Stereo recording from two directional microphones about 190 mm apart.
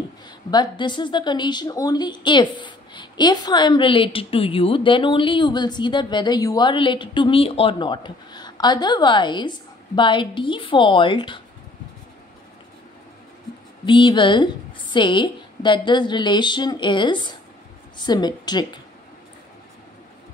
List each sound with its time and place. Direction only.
0.5 s a woman's voice: 25° left (ahead or behind)
13.8 s a woman's voice: 25° left (ahead or behind)